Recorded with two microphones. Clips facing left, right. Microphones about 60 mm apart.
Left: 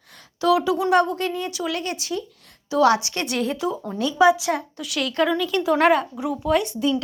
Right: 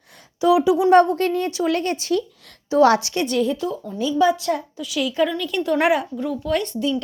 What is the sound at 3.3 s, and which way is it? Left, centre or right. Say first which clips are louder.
Speech: right 3 dB; left.